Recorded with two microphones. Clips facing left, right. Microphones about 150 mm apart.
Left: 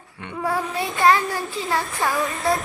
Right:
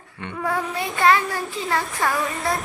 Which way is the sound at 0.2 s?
5° left (ahead or behind).